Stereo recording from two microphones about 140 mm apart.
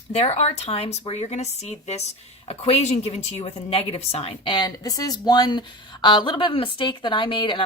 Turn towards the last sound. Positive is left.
turn(degrees=35)  # may be behind; listen again after turning